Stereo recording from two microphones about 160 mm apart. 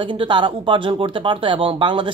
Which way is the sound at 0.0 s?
30° right (ahead or behind).